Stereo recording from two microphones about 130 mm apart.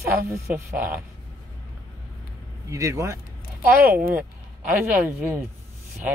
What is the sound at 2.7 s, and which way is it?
Speech, 25° right (ahead or behind).